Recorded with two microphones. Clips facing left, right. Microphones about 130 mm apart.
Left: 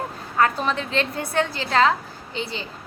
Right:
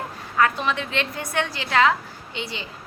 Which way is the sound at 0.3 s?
35° left (ahead or behind).